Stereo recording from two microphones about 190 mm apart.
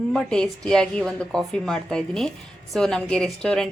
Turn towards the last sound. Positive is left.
turn(degrees=5)  # may be behind; listen again after turning